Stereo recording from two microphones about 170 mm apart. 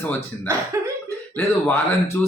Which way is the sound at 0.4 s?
15° right (ahead or behind).